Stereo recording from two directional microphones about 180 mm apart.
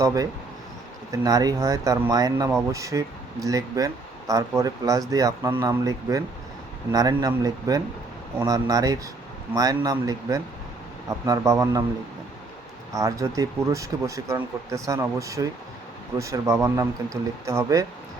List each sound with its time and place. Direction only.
0.0 s speech: 20° right (ahead or behind)
12.9 s speech: 20° right (ahead or behind)